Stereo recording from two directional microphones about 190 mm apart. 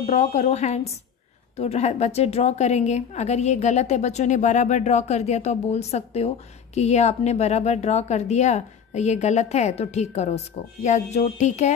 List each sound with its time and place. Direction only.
0.1 s a woman's voice: 35° left (ahead or behind)